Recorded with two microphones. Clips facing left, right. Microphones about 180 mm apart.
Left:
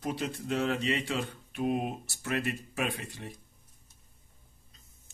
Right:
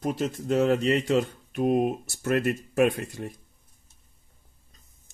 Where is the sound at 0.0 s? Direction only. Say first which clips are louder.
Right 6 dB; 45° right (ahead or behind).